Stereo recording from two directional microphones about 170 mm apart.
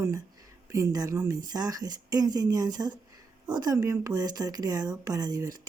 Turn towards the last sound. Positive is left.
turn(degrees=-20)  # may be behind; listen again after turning